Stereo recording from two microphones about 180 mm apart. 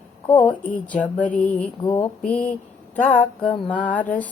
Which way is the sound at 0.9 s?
10° left (ahead or behind).